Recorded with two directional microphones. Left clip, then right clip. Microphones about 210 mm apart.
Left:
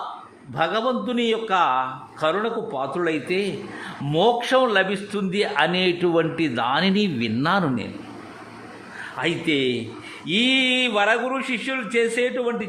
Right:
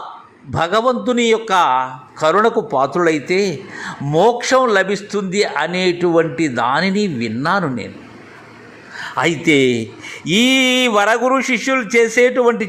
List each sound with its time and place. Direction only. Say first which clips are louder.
0.5 s a man's voice: right 7 dB; 20° right (ahead or behind)
2.3 s a man's voice: right 11 dB; 25° right (ahead or behind)
3.0 s a man's voice: right 8 dB; 15° right (ahead or behind)
9.1 s a man's voice: right 9 dB; 20° right (ahead or behind)